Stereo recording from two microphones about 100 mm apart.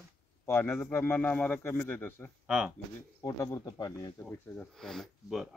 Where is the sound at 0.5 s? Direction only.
25° left (ahead or behind).